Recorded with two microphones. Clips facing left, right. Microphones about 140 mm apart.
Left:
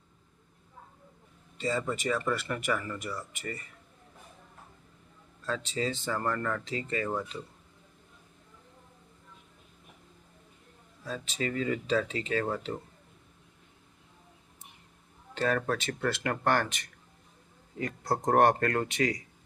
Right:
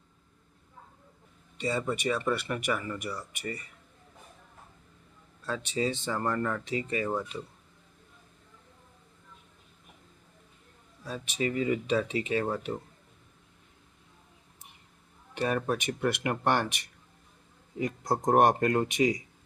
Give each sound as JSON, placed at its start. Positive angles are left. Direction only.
{"t": 1.5, "sound": "speech", "side_deg": -15}
{"t": 5.7, "sound": "speech", "side_deg": -15}
{"t": 11.1, "sound": "speech", "side_deg": -15}
{"t": 15.4, "sound": "speech", "side_deg": -15}